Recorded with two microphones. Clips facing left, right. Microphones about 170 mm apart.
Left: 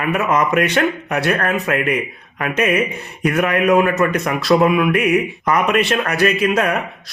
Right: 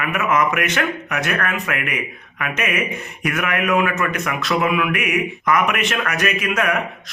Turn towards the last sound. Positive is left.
turn(degrees=35)  # may be behind; listen again after turning